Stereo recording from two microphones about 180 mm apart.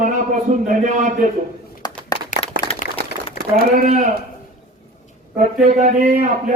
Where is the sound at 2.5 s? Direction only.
55° right (ahead or behind).